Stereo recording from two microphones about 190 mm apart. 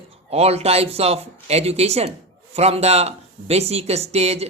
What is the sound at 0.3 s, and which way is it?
Speech, 35° right (ahead or behind).